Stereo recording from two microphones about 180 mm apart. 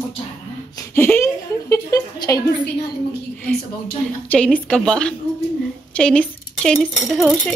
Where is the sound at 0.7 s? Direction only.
15° left (ahead or behind).